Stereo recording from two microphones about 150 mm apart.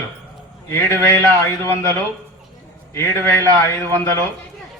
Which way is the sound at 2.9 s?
15° left (ahead or behind).